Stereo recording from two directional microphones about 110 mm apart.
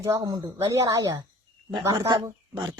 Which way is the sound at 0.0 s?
35° right (ahead or behind).